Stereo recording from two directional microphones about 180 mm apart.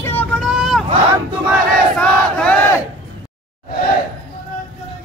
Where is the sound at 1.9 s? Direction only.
5° left (ahead or behind).